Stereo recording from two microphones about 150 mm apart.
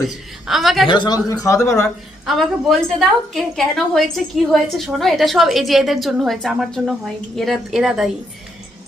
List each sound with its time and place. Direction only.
0.1 s a woman's voice: centre (ahead or behind)
0.9 s speech: 30° left (ahead or behind)
2.2 s a woman's voice: centre (ahead or behind)